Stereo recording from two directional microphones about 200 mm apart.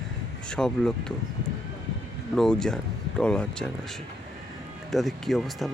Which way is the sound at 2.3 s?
5° left (ahead or behind).